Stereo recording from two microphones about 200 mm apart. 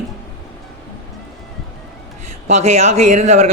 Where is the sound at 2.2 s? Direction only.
35° right (ahead or behind).